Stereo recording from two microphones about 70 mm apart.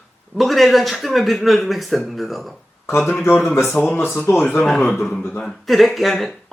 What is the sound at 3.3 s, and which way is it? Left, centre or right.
Speech, left.